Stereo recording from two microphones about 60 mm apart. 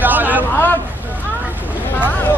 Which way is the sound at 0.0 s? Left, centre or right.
Right.